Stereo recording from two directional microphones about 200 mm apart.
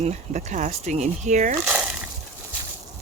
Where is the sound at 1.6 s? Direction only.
5° right (ahead or behind).